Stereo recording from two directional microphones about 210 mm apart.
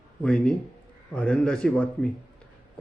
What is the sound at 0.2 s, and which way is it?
A man's voice, 5° left (ahead or behind).